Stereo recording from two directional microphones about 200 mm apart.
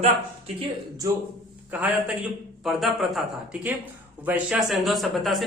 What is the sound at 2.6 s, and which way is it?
A man's voice, centre (ahead or behind).